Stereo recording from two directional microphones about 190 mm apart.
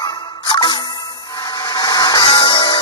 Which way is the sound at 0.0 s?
20° left (ahead or behind).